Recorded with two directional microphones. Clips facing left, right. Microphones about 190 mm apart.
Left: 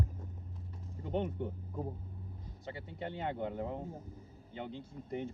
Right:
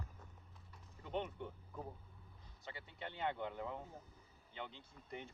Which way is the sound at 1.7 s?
30° left (ahead or behind).